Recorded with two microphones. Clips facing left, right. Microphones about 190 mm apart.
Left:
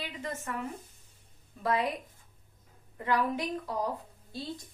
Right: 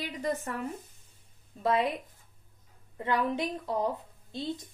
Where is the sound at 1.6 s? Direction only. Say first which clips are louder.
Right 3 dB; 25° right (ahead or behind).